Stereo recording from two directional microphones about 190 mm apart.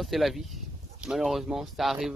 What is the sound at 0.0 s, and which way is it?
Speech, centre (ahead or behind).